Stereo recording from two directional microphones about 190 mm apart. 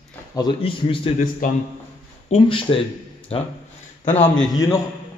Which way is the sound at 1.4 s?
45° left (ahead or behind).